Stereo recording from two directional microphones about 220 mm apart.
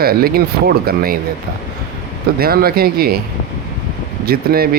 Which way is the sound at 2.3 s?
45° right (ahead or behind).